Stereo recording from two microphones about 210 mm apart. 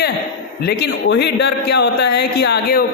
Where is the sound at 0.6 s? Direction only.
50° left (ahead or behind).